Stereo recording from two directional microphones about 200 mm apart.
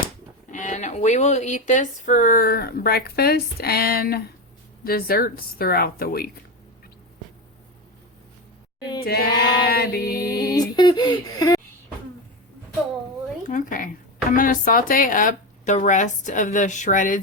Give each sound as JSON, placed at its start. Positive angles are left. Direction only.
{"t": 0.5, "sound": "speech", "side_deg": 40}
{"t": 9.0, "sound": "speech", "side_deg": 50}
{"t": 10.8, "sound": "speech", "side_deg": 20}
{"t": 13.4, "sound": "speech", "side_deg": 40}